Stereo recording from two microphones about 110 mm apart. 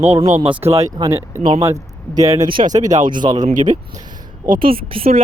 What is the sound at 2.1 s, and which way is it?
Speech, 35° right (ahead or behind).